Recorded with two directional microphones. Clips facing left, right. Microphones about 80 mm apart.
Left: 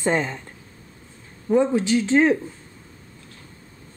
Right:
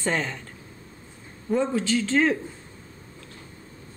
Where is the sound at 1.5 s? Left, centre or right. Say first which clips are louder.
Left 5 dB; centre.